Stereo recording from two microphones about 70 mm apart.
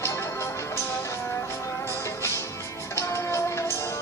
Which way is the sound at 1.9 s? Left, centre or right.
Left.